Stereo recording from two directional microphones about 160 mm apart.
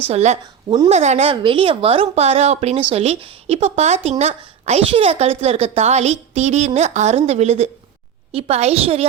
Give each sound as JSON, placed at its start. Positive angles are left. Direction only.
{"t": 0.1, "sound": "a woman's voice", "side_deg": -45}
{"t": 1.4, "sound": "a woman's voice", "side_deg": -35}